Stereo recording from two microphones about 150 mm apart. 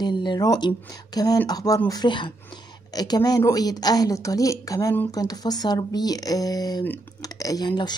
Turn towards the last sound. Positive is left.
turn(degrees=30)  # may be behind; listen again after turning